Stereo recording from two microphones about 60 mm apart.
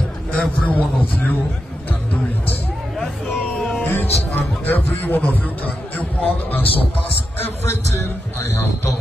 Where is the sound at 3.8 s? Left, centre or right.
Left.